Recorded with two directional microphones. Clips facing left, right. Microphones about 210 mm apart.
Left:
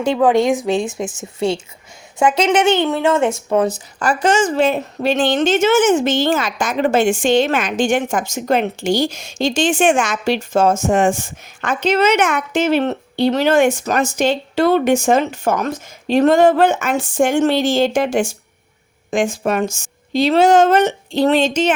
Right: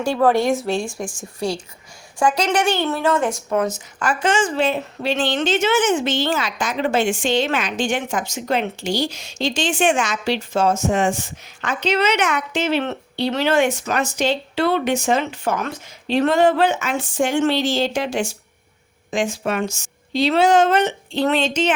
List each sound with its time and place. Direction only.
0.0 s a woman's voice: 15° left (ahead or behind); by 21.8 s 45° left (ahead or behind)